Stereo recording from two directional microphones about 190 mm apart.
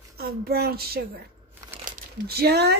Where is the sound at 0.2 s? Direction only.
55° right (ahead or behind).